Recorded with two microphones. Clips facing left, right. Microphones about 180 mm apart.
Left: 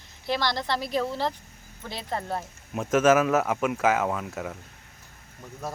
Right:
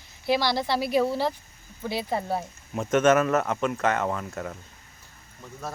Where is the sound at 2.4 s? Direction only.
5° left (ahead or behind).